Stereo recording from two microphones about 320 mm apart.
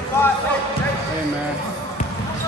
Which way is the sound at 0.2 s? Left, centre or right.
Centre.